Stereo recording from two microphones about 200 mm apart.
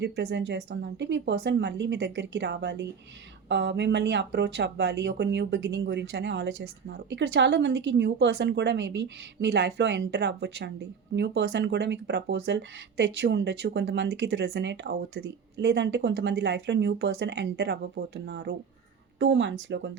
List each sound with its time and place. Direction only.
0.0 s speech: 60° right (ahead or behind)